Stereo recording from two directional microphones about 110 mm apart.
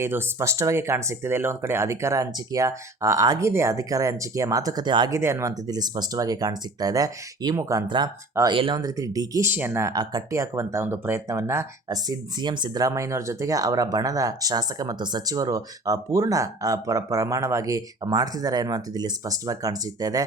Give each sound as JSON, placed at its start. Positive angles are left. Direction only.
{"t": 0.0, "sound": "speech", "side_deg": -25}
{"t": 5.1, "sound": "speech", "side_deg": -25}
{"t": 7.9, "sound": "speech", "side_deg": -45}
{"t": 8.8, "sound": "speech", "side_deg": -30}
{"t": 9.5, "sound": "speech", "side_deg": -20}
{"t": 9.9, "sound": "speech", "side_deg": -35}